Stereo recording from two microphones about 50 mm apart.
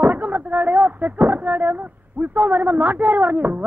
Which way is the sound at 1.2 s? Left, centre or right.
Right.